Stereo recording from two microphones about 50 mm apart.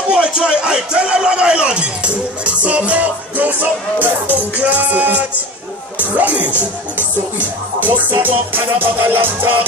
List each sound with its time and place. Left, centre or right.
0.1 s a sound: right
6.1 s speech: right
7.0 s music: right